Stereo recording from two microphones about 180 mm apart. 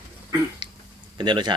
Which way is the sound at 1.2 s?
25° right (ahead or behind).